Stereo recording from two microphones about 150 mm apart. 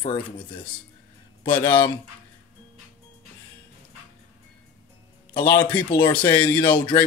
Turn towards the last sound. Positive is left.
turn(degrees=30)  # may be behind; listen again after turning